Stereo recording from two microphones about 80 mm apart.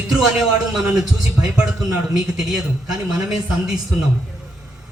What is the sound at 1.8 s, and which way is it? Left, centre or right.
A man's voice, centre.